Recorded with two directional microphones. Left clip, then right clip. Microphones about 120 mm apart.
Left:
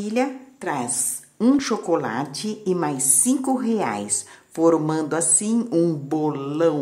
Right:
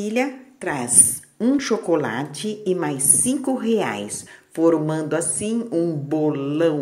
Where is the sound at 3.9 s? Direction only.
Centre (ahead or behind).